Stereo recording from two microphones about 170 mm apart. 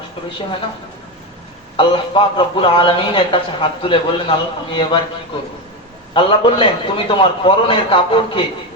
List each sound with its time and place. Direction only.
1.7 s a man's voice: 30° left (ahead or behind)
6.1 s a man's voice: 30° left (ahead or behind)